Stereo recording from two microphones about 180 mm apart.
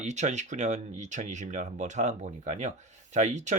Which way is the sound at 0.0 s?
40° right (ahead or behind).